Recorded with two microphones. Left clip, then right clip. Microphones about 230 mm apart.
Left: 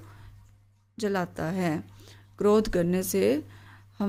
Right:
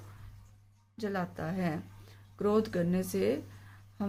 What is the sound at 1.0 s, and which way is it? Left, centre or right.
Speech, left.